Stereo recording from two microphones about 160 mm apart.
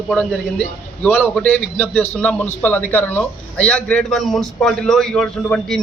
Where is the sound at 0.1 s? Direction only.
5° left (ahead or behind).